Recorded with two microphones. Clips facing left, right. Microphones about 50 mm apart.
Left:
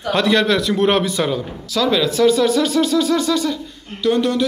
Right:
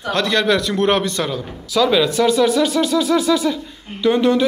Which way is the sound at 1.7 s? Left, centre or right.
Centre.